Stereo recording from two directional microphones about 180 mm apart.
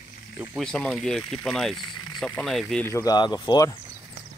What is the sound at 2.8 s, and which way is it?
Speech, 20° left (ahead or behind).